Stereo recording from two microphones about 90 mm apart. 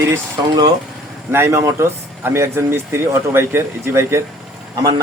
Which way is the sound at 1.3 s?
25° right (ahead or behind).